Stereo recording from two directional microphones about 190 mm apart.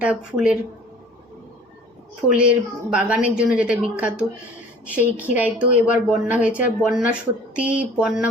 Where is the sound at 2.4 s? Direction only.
5° right (ahead or behind).